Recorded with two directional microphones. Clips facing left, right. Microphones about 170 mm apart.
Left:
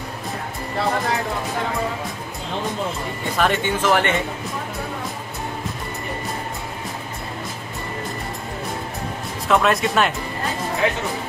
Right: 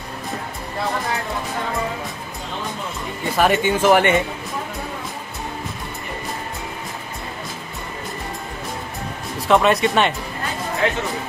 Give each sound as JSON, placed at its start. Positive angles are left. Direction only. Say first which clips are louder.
{"t": 3.3, "sound": "speech", "louder": "right 3 dB", "side_deg": -10}
{"t": 9.5, "sound": "speech", "louder": "right 2 dB", "side_deg": 0}